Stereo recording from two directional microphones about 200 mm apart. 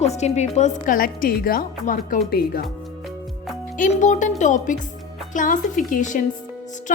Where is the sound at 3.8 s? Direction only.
35° left (ahead or behind).